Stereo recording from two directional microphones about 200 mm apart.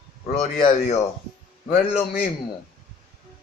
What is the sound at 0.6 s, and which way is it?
Speech, 40° left (ahead or behind).